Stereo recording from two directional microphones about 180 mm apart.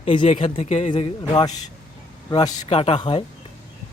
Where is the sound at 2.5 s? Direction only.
35° left (ahead or behind).